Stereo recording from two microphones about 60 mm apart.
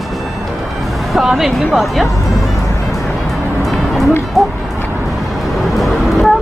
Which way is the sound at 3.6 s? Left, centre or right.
Centre.